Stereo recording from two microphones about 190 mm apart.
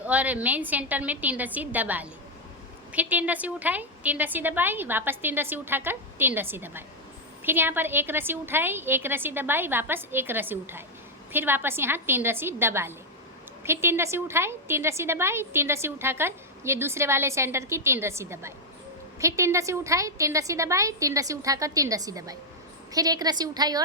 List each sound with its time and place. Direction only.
0.0 s a woman's voice: 10° right (ahead or behind)